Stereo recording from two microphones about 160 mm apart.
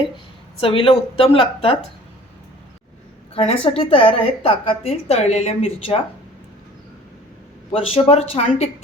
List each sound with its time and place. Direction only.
0.6 s a woman's voice: 35° left (ahead or behind)
3.3 s a woman's voice: 35° left (ahead or behind)
7.7 s a woman's voice: 35° left (ahead or behind)